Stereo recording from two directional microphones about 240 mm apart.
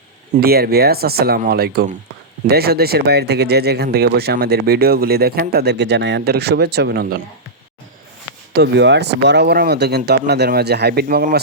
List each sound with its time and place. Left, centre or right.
0.3 s speech: right
8.5 s speech: right